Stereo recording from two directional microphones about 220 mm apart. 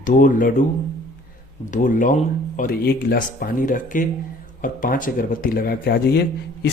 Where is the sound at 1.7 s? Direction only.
35° left (ahead or behind).